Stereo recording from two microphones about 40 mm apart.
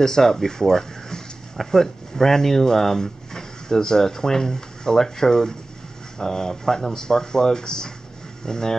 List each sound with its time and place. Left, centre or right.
0.0 s speech: centre